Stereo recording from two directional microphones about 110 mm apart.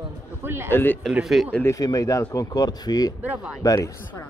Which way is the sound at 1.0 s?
Centre (ahead or behind).